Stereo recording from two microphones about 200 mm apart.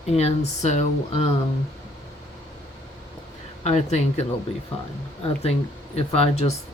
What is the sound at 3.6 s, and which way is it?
Speech, 35° left (ahead or behind).